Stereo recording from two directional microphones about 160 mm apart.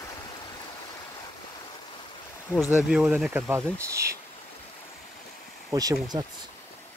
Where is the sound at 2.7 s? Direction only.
5° right (ahead or behind).